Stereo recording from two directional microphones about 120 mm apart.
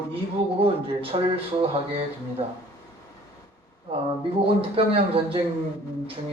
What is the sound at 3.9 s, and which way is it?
A man's voice, 50° right (ahead or behind).